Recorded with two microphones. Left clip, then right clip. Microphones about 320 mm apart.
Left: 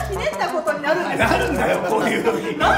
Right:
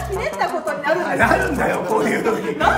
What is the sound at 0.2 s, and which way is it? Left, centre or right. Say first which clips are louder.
Speech: even; centre.